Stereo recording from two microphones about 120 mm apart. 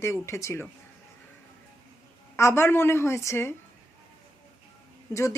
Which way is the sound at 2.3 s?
20° left (ahead or behind).